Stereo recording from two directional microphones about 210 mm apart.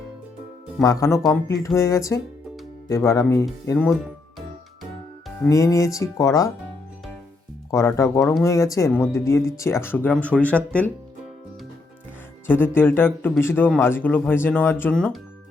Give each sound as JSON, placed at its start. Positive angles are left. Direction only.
{"t": 0.8, "sound": "speech", "side_deg": 15}
{"t": 5.5, "sound": "speech", "side_deg": 15}
{"t": 7.7, "sound": "speech", "side_deg": 15}
{"t": 8.2, "sound": "speech", "side_deg": 0}
{"t": 8.4, "sound": "speech", "side_deg": 15}
{"t": 12.5, "sound": "speech", "side_deg": 10}